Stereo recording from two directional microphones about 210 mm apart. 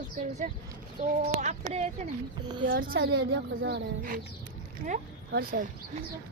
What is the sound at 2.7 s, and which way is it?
A woman's voice, 45° right (ahead or behind).